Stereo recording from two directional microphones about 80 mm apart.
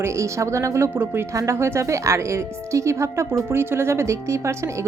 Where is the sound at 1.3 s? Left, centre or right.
Right.